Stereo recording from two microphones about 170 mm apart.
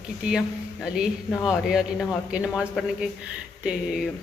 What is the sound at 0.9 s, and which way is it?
Speech, centre (ahead or behind).